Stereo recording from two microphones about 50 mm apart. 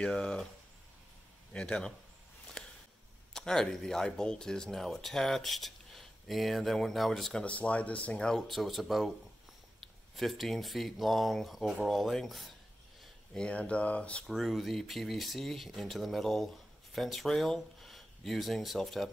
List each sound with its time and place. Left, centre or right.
0.0 s speech: centre
1.5 s speech: centre
2.6 s a sound: centre
3.3 s speech: centre
7.4 s speech: left
8.4 s speech: centre
10.1 s speech: centre
13.3 s speech: left
14.2 s speech: centre